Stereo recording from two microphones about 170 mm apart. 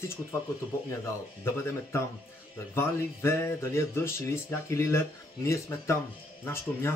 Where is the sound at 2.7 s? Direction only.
15° left (ahead or behind).